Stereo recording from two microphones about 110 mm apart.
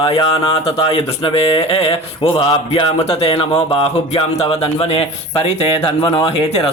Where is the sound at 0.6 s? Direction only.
60° left (ahead or behind).